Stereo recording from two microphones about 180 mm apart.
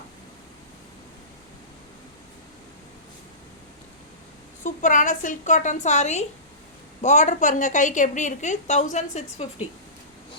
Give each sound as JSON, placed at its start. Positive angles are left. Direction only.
{"t": 4.6, "sound": "a woman's voice", "side_deg": 45}